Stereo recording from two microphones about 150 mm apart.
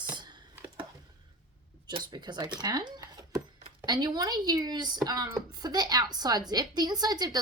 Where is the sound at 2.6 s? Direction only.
30° right (ahead or behind).